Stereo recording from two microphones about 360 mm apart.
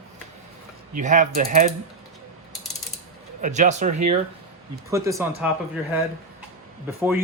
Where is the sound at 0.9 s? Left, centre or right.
Right.